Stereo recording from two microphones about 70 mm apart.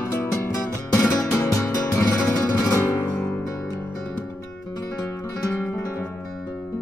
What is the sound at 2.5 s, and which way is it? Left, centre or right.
Music, left.